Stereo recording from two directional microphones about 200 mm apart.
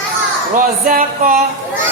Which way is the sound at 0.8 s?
40° right (ahead or behind).